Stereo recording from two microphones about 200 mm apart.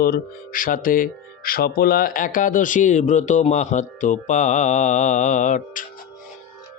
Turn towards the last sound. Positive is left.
turn(degrees=40)  # may be behind; listen again after turning